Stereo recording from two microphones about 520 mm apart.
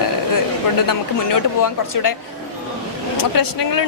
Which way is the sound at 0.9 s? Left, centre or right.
Left.